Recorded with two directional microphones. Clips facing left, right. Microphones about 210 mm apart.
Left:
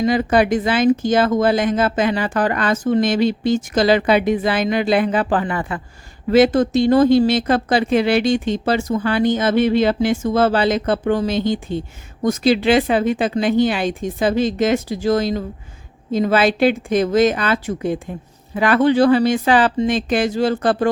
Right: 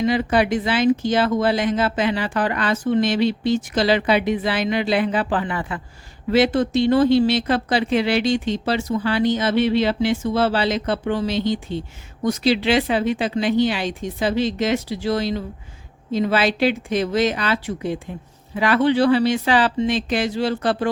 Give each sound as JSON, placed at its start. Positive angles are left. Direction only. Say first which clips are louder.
{"t": 0.0, "sound": "speech", "louder": "left 3 dB", "side_deg": 45}